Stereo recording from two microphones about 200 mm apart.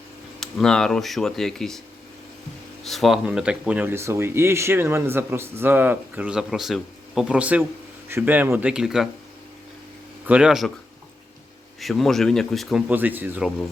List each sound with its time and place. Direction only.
0.3 s speech: 5° left (ahead or behind)
2.8 s speech: centre (ahead or behind)
10.2 s speech: 5° right (ahead or behind)
11.8 s speech: centre (ahead or behind)